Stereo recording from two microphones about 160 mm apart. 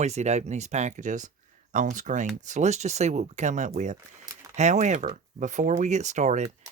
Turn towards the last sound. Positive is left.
turn(degrees=-50)  # may be behind; listen again after turning